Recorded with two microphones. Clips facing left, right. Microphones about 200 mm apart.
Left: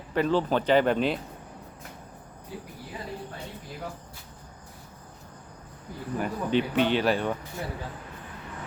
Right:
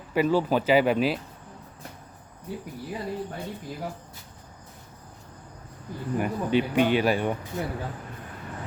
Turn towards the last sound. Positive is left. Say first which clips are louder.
# right 2 dB
turn(degrees=-15)  # may be behind; listen again after turning